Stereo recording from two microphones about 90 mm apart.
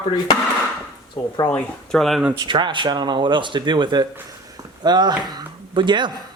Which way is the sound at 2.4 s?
60° right (ahead or behind).